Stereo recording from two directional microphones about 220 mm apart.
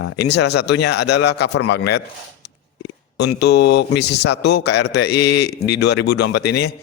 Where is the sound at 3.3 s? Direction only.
50° left (ahead or behind).